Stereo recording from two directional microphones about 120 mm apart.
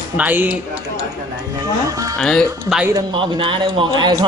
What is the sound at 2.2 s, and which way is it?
Speech, 5° left (ahead or behind).